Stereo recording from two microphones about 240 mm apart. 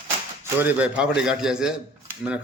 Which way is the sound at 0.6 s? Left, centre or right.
Centre.